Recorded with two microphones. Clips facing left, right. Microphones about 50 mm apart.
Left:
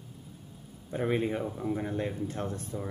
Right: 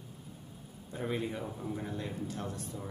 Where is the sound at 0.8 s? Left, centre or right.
Left.